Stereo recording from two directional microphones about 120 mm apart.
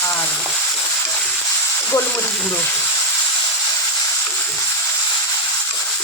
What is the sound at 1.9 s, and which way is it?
Speech, 15° left (ahead or behind).